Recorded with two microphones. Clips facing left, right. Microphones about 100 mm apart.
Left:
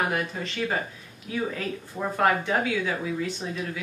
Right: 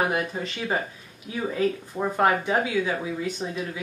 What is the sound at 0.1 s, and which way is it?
Speech, 20° right (ahead or behind).